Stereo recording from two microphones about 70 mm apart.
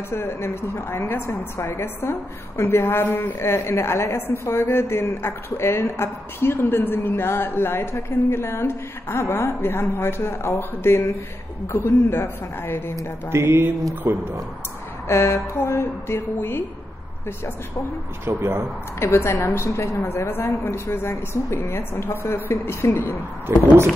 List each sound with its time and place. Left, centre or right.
0.1 s a woman's voice: left
13.3 s mantra: right
15.0 s a woman's voice: left
18.2 s mantra: right
18.9 s a woman's voice: left
23.5 s mantra: right